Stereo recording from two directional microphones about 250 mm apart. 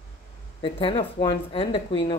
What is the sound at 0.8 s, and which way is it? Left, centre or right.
Speech, left.